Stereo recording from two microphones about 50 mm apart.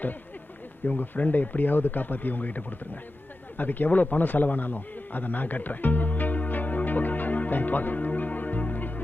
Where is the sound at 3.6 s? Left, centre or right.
Left.